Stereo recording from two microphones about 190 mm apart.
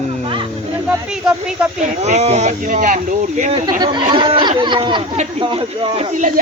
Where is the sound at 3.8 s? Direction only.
25° right (ahead or behind).